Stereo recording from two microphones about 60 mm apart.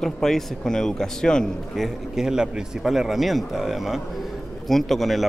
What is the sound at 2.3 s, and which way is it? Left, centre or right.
Speech, centre.